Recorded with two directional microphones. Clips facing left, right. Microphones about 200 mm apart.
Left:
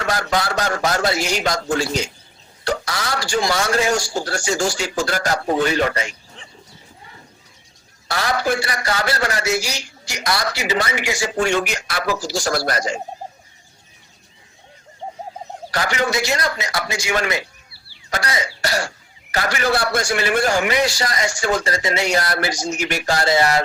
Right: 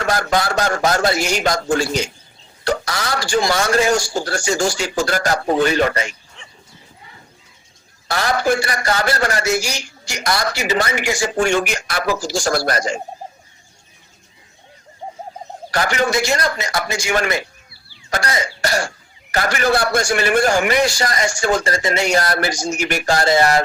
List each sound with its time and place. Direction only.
0.0 s a man's voice: 45° right (ahead or behind)
6.4 s a sound: 35° left (ahead or behind)
8.0 s a man's voice: 50° right (ahead or behind)
15.7 s a man's voice: 50° right (ahead or behind)